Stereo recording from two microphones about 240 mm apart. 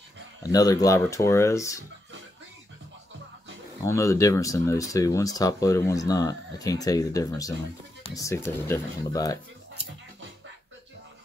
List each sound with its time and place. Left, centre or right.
0.4 s speech: centre
3.8 s speech: centre